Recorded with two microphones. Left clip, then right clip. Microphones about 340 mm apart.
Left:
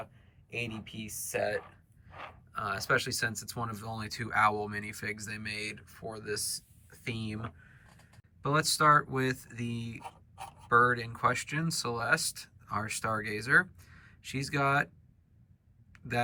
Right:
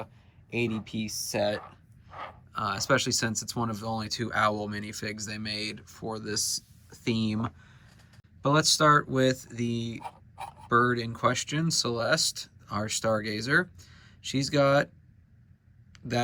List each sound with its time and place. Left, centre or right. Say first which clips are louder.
0.5 s speech: right 7 dB; centre
2.5 s speech: right 3 dB; centre
15.9 s a sound: right 2 dB; centre